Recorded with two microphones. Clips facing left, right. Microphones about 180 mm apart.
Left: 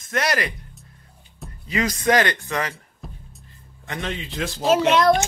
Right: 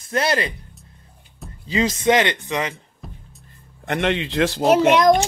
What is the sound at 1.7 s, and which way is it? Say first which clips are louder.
Speech: right 3 dB; 25° right (ahead or behind).